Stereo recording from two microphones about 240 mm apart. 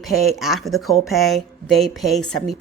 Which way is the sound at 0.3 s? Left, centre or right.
Centre.